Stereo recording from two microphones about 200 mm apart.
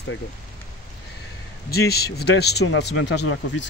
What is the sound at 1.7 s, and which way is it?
Speech, 50° left (ahead or behind).